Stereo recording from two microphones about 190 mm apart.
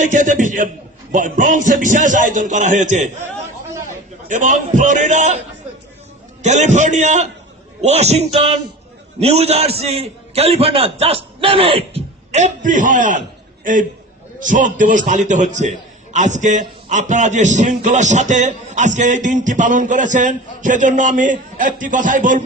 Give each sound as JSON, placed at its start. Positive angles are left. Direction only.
{"t": 0.0, "sound": "a man's voice", "side_deg": -40}
{"t": 4.3, "sound": "a man's voice", "side_deg": -40}
{"t": 6.4, "sound": "a man's voice", "side_deg": -40}
{"t": 14.3, "sound": "a man's voice", "side_deg": -45}